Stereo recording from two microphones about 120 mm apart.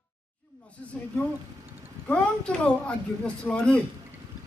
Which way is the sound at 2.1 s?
10° left (ahead or behind).